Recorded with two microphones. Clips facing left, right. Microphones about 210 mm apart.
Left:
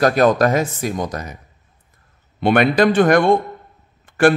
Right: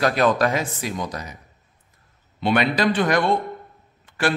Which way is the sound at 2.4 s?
50° left (ahead or behind).